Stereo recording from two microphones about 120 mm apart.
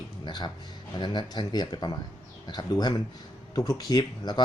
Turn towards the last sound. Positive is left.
turn(degrees=35)  # may be behind; listen again after turning